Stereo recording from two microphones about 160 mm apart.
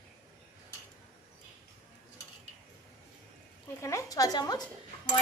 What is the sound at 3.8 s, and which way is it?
Speech, 20° left (ahead or behind).